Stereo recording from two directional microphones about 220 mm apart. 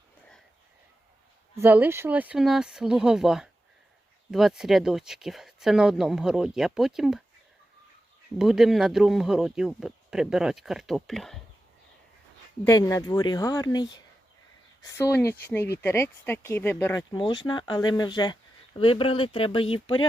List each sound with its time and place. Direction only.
1.5 s speech: 10° right (ahead or behind)
8.4 s speech: centre (ahead or behind)
12.6 s speech: 15° left (ahead or behind)